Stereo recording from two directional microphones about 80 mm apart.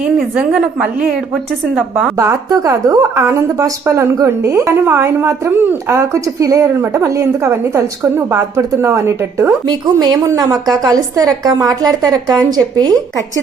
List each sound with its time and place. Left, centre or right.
0.3 s a woman's voice: centre
2.1 s a woman's voice: right
9.6 s speech: right
10.8 s a woman's voice: right